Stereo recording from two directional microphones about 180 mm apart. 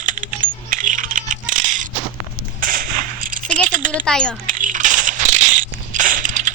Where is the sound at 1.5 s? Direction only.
45° right (ahead or behind).